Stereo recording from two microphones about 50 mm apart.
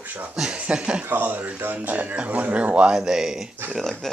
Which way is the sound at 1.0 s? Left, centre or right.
Right.